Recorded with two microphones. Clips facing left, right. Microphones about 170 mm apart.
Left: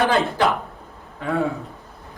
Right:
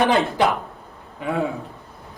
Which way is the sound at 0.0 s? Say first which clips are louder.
Right 1 dB; 20° right (ahead or behind).